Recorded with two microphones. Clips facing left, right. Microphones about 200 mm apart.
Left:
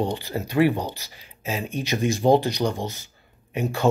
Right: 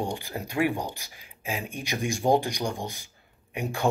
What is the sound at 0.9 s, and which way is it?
Speech, 10° right (ahead or behind).